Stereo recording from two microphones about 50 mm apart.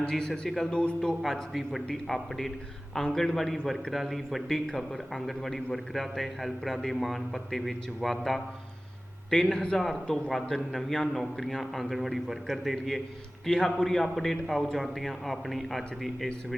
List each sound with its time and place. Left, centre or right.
0.0 s speech: centre
0.8 s a man's voice: centre
1.2 s a man's voice: centre
9.3 s a man's voice: centre